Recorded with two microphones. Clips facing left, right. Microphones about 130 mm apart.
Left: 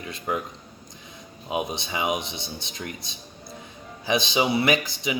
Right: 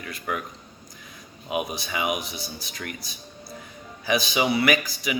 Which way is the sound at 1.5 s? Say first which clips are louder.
Even; 25° left (ahead or behind).